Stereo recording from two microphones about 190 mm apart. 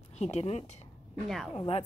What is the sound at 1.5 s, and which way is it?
Speech, 25° left (ahead or behind).